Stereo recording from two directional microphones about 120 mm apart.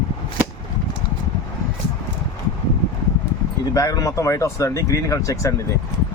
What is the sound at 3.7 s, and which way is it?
Speech, 30° left (ahead or behind).